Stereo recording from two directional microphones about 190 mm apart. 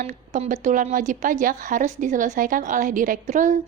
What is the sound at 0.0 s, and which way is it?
A woman's voice, 40° right (ahead or behind).